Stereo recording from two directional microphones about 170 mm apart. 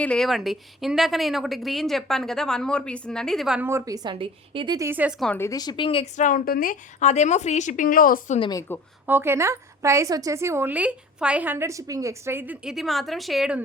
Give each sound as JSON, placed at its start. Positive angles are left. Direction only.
{"t": 0.0, "sound": "a woman's voice", "side_deg": 5}
{"t": 3.7, "sound": "a woman's voice", "side_deg": -20}
{"t": 4.9, "sound": "a woman's voice", "side_deg": -10}
{"t": 5.2, "sound": "speech", "side_deg": 10}
{"t": 5.5, "sound": "speech", "side_deg": 25}
{"t": 6.1, "sound": "a woman's voice", "side_deg": 50}
{"t": 8.4, "sound": "speech", "side_deg": 25}
{"t": 9.0, "sound": "a woman's voice", "side_deg": -15}